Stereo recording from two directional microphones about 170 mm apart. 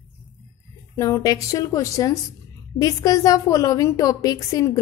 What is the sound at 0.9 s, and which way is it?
A woman's voice, 20° left (ahead or behind).